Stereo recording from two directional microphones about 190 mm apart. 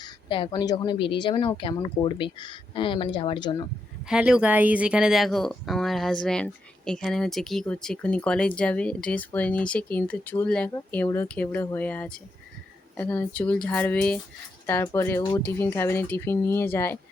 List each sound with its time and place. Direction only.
0.0 s a woman's voice: 25° left (ahead or behind)
4.0 s speech: 5° right (ahead or behind); by 17.0 s 10° left (ahead or behind)